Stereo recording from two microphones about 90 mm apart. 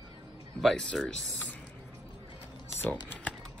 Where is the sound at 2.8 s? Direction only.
20° left (ahead or behind).